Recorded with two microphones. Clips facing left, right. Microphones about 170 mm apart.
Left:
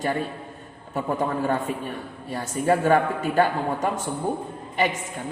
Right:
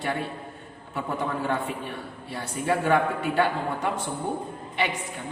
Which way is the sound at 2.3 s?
40° left (ahead or behind).